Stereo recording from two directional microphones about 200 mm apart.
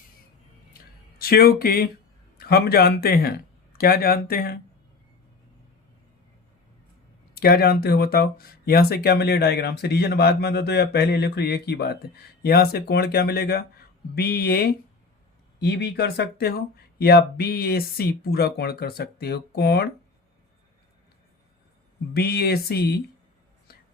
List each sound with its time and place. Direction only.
1.2 s speech: 50° left (ahead or behind)
7.3 s speech: 50° left (ahead or behind)
22.1 s speech: 50° left (ahead or behind)